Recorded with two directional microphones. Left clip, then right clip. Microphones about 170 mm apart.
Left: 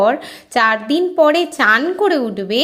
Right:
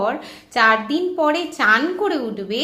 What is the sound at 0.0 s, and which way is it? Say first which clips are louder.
A woman's voice: left 7 dB; 45° left (ahead or behind).